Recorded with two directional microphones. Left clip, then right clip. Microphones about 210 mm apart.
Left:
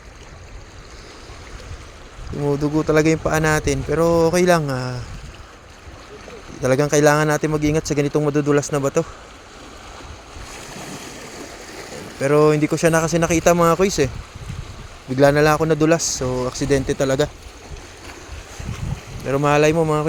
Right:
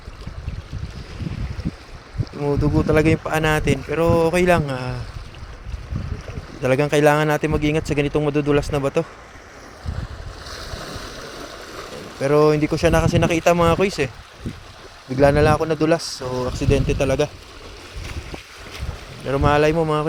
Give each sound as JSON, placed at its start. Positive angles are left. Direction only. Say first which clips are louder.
{"t": 2.4, "sound": "speech", "louder": "left 1 dB", "side_deg": 5}
{"t": 6.6, "sound": "speech", "louder": "left 1 dB", "side_deg": 5}
{"t": 10.8, "sound": "vehicle", "louder": "right 1 dB", "side_deg": 40}
{"t": 12.2, "sound": "speech", "louder": "left 1 dB", "side_deg": 10}
{"t": 15.1, "sound": "speech", "louder": "left 1 dB", "side_deg": 10}
{"t": 19.3, "sound": "speech", "louder": "left 1 dB", "side_deg": 10}